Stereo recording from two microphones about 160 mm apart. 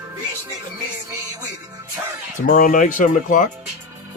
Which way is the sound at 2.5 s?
60° left (ahead or behind).